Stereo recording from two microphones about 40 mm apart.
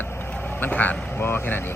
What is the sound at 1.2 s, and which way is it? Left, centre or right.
Speech, left.